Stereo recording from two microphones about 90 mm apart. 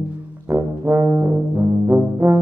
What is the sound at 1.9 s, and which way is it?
Music, 35° right (ahead or behind).